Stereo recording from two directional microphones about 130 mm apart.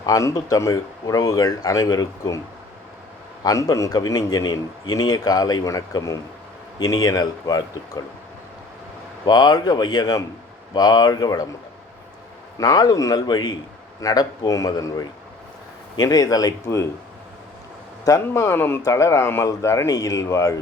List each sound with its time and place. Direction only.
0.0 s a man's voice: 25° left (ahead or behind)
3.4 s a man's voice: 25° left (ahead or behind)
9.2 s speech: 30° left (ahead or behind)
12.5 s a man's voice: 30° left (ahead or behind)
18.2 s a man's voice: 20° left (ahead or behind)